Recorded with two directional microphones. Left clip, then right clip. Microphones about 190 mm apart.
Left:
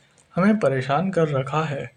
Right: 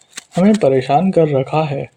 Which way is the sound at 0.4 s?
35° right (ahead or behind).